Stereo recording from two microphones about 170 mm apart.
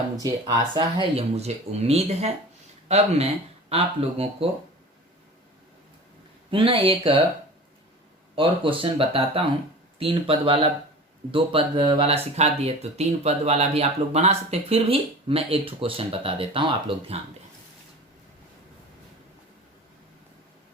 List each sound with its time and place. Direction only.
0.2 s speech: 20° right (ahead or behind)
6.5 s speech: 30° right (ahead or behind)
8.4 s speech: 30° right (ahead or behind)